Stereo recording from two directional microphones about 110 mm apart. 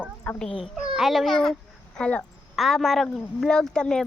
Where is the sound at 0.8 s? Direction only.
5° right (ahead or behind).